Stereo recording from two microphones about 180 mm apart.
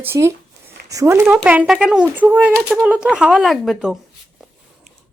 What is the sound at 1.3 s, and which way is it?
Speech, 5° right (ahead or behind).